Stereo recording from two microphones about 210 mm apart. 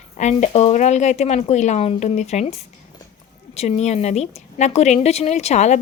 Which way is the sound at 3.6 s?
30° left (ahead or behind).